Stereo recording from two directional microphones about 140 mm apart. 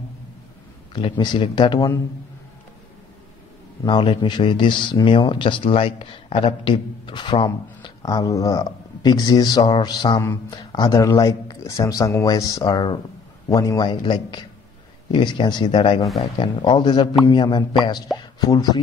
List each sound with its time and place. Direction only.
0.9 s speech: 35° left (ahead or behind)
3.8 s speech: 35° left (ahead or behind)